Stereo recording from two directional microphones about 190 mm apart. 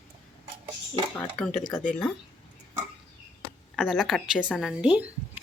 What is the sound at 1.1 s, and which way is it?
Speech, 5° left (ahead or behind).